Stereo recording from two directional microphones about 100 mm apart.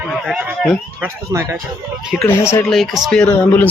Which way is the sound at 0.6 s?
5° left (ahead or behind).